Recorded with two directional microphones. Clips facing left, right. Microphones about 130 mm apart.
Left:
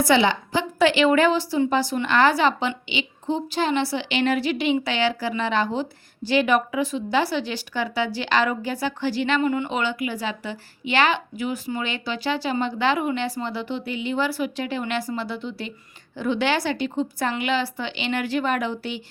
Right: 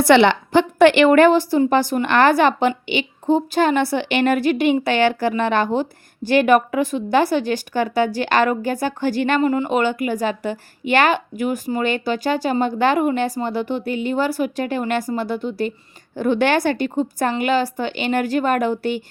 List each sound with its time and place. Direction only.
0.0 s a woman's voice: 65° right (ahead or behind); by 19.0 s 50° right (ahead or behind)